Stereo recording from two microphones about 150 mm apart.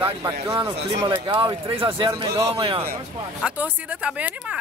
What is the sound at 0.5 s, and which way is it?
Speech, 30° right (ahead or behind).